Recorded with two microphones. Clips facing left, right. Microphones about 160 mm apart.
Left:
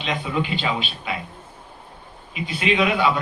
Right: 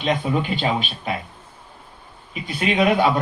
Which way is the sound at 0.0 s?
50° right (ahead or behind).